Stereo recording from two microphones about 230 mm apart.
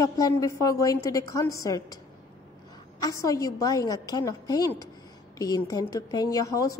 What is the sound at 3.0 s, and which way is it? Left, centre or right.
A woman's voice, centre.